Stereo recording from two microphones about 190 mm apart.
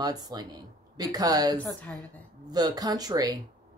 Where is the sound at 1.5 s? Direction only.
5° left (ahead or behind).